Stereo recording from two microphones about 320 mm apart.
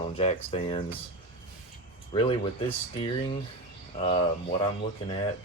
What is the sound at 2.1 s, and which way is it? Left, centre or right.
Speech, centre.